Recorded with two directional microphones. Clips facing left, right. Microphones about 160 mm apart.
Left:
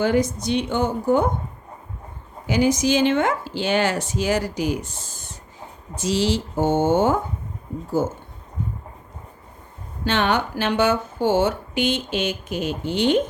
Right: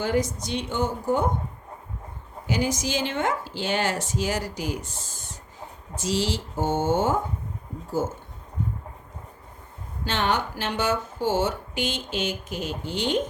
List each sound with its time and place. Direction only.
0.0 s speech: 65° left (ahead or behind)
2.5 s speech: 65° left (ahead or behind)
6.0 s speech: 70° left (ahead or behind)
10.1 s speech: 65° left (ahead or behind)